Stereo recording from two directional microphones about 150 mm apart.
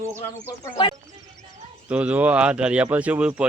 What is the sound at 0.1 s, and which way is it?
Speech, 15° right (ahead or behind).